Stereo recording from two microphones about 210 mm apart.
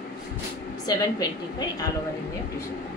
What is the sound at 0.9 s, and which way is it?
Speech, 20° left (ahead or behind).